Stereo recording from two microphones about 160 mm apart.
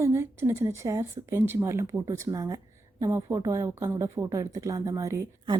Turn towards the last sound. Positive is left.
turn(degrees=-20)  # may be behind; listen again after turning